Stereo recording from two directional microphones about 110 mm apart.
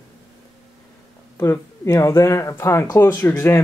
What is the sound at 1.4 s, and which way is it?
Speech, 25° left (ahead or behind).